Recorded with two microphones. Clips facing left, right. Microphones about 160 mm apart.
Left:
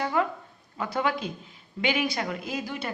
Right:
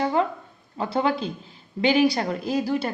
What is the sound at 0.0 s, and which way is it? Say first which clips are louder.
A woman's voice: right 4 dB; 30° right (ahead or behind).